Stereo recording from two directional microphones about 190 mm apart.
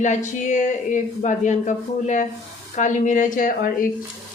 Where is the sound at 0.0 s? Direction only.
40° left (ahead or behind).